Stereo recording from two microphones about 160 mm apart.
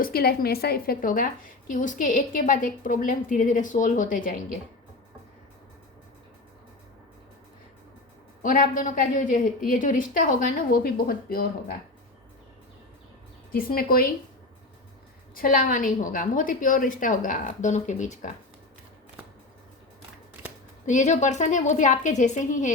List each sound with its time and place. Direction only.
0.0 s a woman's voice: 75° left (ahead or behind); by 4.4 s 60° left (ahead or behind)
8.4 s a woman's voice: 60° left (ahead or behind)
13.5 s a woman's voice: 65° left (ahead or behind)
15.4 s a woman's voice: 60° left (ahead or behind)
20.8 s a woman's voice: 50° left (ahead or behind)